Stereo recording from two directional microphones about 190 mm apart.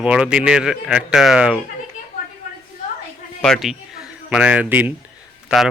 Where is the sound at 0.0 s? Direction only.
5° right (ahead or behind).